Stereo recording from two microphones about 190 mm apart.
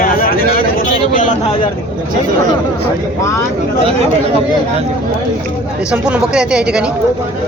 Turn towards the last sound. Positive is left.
turn(degrees=-5)  # may be behind; listen again after turning